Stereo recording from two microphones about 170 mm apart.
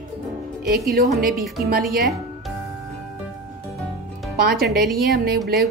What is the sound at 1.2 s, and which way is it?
Speech, centre (ahead or behind).